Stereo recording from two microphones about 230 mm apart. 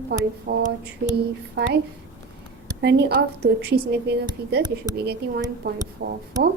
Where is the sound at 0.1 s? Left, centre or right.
Right.